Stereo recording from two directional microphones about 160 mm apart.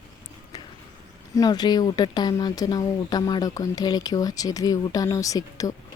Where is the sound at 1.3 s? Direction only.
25° left (ahead or behind).